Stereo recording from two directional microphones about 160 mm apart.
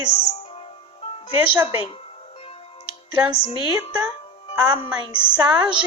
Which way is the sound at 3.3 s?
35° left (ahead or behind).